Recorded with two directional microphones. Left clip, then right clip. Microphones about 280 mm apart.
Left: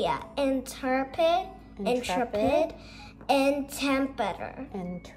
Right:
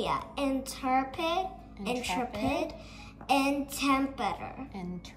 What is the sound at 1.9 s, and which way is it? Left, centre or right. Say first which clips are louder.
Speech: left 5 dB; left.